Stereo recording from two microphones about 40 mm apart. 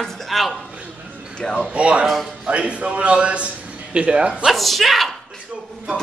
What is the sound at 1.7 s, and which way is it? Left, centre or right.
A man's voice, right.